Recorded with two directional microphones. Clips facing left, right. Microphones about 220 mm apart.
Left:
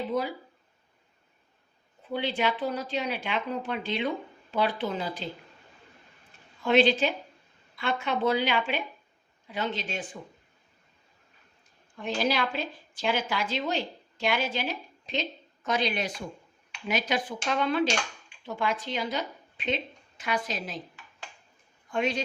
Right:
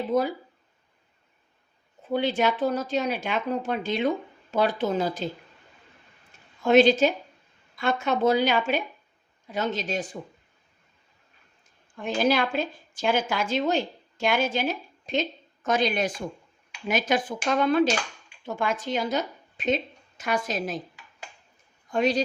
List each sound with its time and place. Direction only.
0.1 s speech: 45° right (ahead or behind)
2.0 s speech: 45° right (ahead or behind)
6.6 s speech: 45° right (ahead or behind)
12.0 s a woman's voice: 50° right (ahead or behind)
21.8 s a man's voice: 40° right (ahead or behind)